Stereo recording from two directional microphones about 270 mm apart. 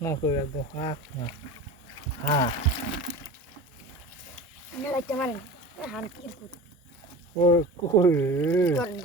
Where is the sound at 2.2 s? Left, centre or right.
Left.